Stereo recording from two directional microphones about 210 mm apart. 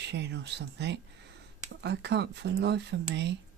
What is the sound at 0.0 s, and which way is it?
Speech, 55° right (ahead or behind).